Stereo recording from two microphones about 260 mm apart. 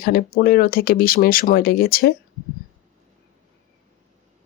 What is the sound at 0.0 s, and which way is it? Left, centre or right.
Speech, left.